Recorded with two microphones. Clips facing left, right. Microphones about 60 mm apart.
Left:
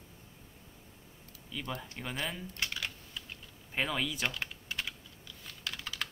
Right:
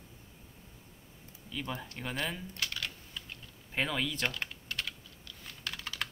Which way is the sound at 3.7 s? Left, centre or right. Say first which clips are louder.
Even; centre.